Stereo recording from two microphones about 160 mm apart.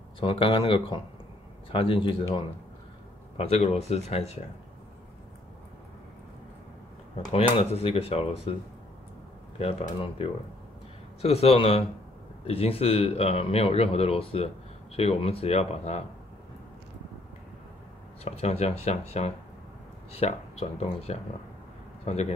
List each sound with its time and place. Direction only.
0.2 s speech: 30° left (ahead or behind)
3.3 s speech: 40° left (ahead or behind)
7.3 s speech: 35° left (ahead or behind)
9.6 s speech: 40° left (ahead or behind)
18.2 s speech: 40° left (ahead or behind)